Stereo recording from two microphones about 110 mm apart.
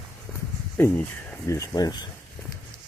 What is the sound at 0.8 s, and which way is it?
Speech, 20° left (ahead or behind).